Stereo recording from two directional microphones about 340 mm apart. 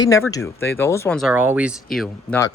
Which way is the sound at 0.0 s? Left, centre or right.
Centre.